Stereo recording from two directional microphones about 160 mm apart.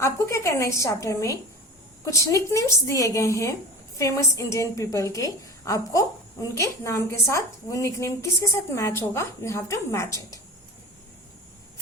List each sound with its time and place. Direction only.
0.0 s a woman's voice: 15° left (ahead or behind)